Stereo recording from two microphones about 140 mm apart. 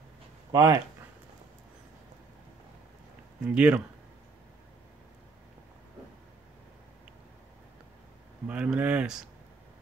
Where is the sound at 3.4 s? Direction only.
10° right (ahead or behind).